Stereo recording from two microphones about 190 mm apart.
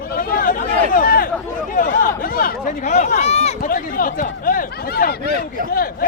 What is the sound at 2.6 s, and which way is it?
Speech, 40° left (ahead or behind).